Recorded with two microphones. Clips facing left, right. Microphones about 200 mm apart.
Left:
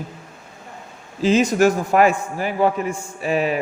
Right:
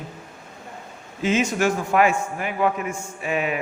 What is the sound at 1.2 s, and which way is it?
A man's voice, 35° left (ahead or behind).